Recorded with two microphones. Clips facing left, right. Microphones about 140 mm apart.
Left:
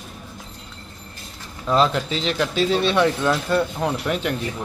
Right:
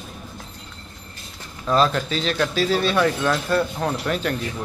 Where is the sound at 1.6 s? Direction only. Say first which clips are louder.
Even; 20° left (ahead or behind).